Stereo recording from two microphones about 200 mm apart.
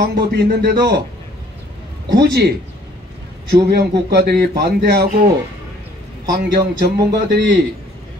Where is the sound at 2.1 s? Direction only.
50° right (ahead or behind).